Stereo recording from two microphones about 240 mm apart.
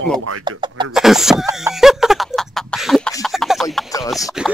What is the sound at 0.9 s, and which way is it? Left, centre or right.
Speech, centre.